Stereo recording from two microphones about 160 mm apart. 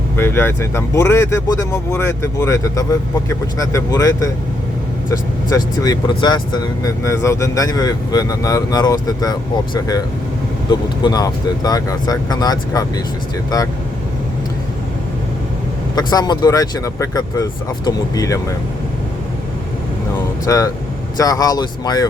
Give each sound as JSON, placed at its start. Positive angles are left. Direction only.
{"t": 0.2, "sound": "speech", "side_deg": 15}
{"t": 16.0, "sound": "speech", "side_deg": 25}
{"t": 20.4, "sound": "speech", "side_deg": 20}